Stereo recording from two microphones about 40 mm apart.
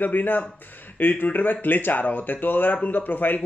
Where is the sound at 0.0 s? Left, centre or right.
Left.